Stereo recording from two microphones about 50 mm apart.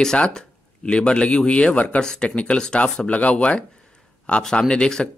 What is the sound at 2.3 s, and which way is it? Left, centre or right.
Speech, left.